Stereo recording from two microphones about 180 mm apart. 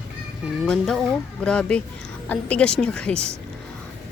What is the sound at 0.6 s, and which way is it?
Speech, centre (ahead or behind).